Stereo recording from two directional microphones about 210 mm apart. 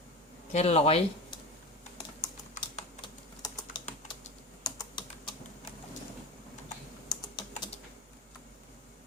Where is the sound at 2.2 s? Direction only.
20° left (ahead or behind).